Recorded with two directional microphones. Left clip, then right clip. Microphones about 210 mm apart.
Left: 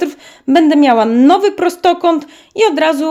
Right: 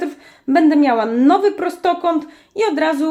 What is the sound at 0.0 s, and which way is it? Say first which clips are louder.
A woman's voice: left 6 dB; 45° left (ahead or behind).